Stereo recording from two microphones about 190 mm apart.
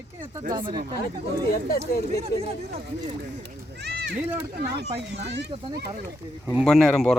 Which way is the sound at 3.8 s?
60° right (ahead or behind).